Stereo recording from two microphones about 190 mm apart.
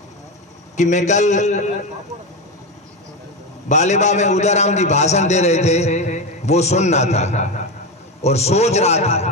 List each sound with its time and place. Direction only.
0.7 s a man's voice: 40° left (ahead or behind)
3.6 s a man's voice: 35° left (ahead or behind)